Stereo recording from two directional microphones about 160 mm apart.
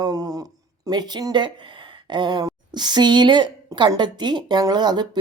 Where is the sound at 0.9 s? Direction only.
25° right (ahead or behind).